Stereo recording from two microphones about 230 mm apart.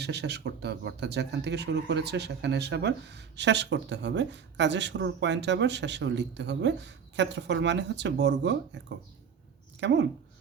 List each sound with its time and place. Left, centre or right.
0.0 s speech: right
9.8 s speech: right